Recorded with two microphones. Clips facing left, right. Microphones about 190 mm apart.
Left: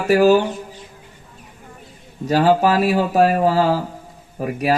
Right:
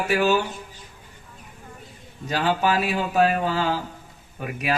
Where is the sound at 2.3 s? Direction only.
35° left (ahead or behind).